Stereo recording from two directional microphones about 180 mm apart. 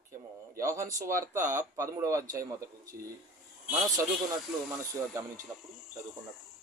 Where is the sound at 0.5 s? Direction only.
15° right (ahead or behind).